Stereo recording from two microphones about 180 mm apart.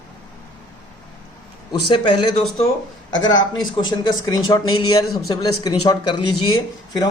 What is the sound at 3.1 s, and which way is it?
Speech, 90° left.